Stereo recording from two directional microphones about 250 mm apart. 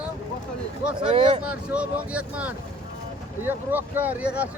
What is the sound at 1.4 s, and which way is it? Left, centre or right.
Speech, centre.